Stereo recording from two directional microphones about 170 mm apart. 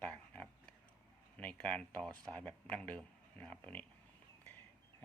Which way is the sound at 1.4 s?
10° left (ahead or behind).